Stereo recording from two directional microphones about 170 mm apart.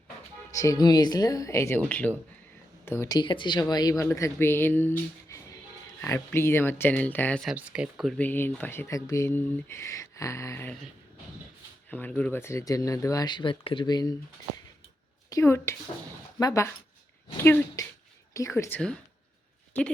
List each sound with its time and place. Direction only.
0.5 s speech: 20° left (ahead or behind)
7.5 s speech: 5° right (ahead or behind); by 10.8 s 15° left (ahead or behind)
11.9 s speech: 10° left (ahead or behind)
15.3 s speech: 15° left (ahead or behind)